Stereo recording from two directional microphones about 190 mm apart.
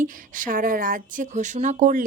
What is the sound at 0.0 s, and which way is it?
A woman's voice, 45° right (ahead or behind).